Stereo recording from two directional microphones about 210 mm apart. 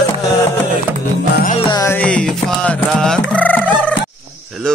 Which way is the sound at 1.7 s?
15° left (ahead or behind).